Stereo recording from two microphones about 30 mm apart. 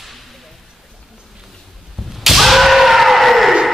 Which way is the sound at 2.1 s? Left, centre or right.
Centre.